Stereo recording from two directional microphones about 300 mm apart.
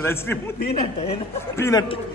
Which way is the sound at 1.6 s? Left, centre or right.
Centre.